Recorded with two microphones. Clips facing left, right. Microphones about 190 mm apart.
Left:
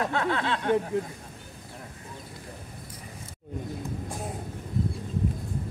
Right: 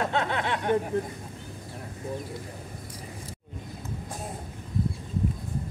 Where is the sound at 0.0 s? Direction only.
20° right (ahead or behind).